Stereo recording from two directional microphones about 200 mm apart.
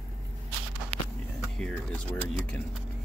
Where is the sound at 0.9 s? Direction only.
25° right (ahead or behind).